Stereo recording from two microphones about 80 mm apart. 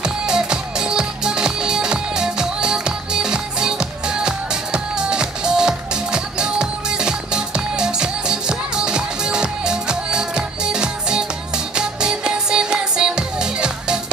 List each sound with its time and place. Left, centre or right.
0.0 s music: centre